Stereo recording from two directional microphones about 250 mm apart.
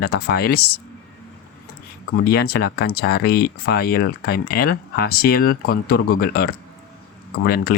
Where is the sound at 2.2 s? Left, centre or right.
Left.